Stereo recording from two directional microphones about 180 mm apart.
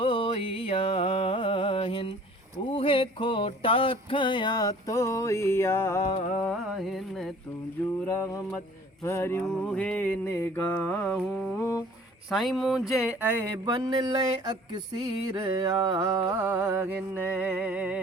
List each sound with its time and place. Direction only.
0.0 s music: 30° left (ahead or behind)
2.6 s a sound: 30° left (ahead or behind); by 6.0 s 15° left (ahead or behind)
6.4 s speech: centre (ahead or behind)
8.0 s music: 15° left (ahead or behind)
12.3 s speech: centre (ahead or behind); by 14.1 s 20° right (ahead or behind)
15.5 s music: 20° right (ahead or behind)